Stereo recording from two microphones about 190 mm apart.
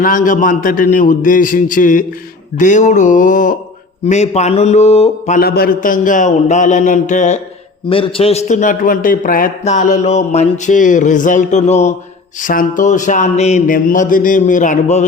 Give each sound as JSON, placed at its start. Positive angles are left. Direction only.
{"t": 0.0, "sound": "a man's voice", "side_deg": 45}
{"t": 5.4, "sound": "a man's voice", "side_deg": 55}
{"t": 7.9, "sound": "a man's voice", "side_deg": 30}